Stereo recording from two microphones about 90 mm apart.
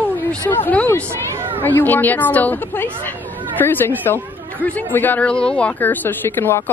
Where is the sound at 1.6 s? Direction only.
20° left (ahead or behind).